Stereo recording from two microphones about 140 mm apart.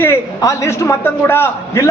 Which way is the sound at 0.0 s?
20° left (ahead or behind).